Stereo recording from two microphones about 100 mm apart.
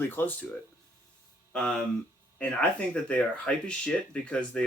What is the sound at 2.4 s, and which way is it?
Speech, 10° left (ahead or behind).